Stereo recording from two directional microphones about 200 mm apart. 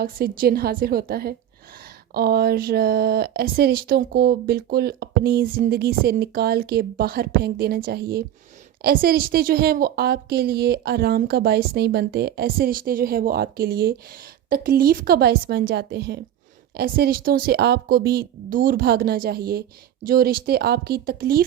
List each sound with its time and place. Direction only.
0.0 s a woman's voice: 45° right (ahead or behind)